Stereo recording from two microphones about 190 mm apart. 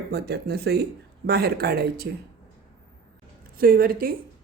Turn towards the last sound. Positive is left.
turn(degrees=-50)  # may be behind; listen again after turning